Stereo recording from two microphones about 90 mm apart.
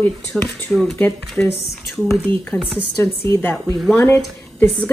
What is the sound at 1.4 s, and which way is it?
Speech, 20° left (ahead or behind).